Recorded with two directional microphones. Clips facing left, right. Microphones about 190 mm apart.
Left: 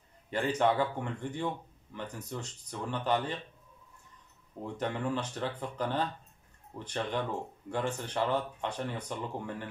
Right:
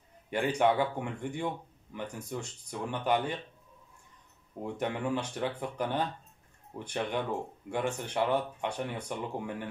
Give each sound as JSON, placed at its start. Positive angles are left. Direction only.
{"t": 0.3, "sound": "speech", "side_deg": -10}
{"t": 4.7, "sound": "speech", "side_deg": -10}